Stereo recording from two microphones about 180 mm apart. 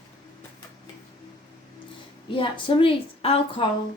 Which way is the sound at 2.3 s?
30° left (ahead or behind).